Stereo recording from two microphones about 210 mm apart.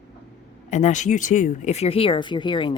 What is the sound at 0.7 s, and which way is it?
Speech, 35° left (ahead or behind).